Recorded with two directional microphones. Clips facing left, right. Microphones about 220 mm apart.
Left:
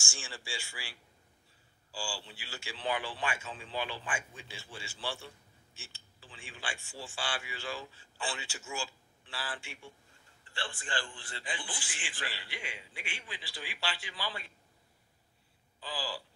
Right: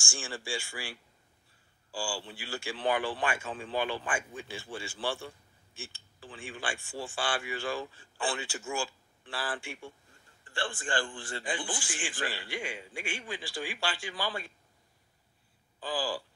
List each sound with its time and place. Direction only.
0.0 s speech: 50° right (ahead or behind)
15.8 s speech: 50° right (ahead or behind)